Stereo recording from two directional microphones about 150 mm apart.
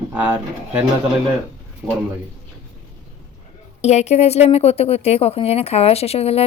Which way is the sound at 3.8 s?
50° left (ahead or behind).